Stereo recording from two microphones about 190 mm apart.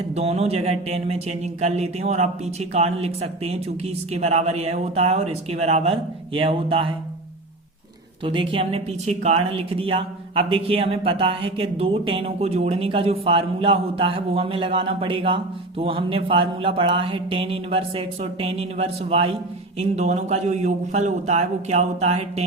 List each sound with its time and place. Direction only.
0.1 s speech: 30° right (ahead or behind)
8.2 s a woman's voice: 25° right (ahead or behind)